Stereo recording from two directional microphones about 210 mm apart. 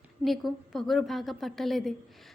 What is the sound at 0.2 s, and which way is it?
A woman's voice, centre (ahead or behind).